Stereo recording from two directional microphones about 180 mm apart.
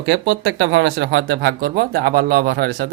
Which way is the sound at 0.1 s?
85° right.